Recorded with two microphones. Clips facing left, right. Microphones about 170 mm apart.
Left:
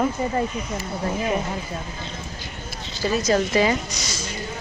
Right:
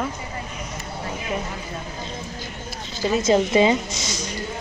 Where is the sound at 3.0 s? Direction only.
25° right (ahead or behind).